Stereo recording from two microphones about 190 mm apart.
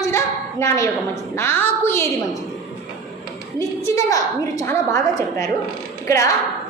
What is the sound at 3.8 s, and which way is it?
A woman's voice, 15° left (ahead or behind).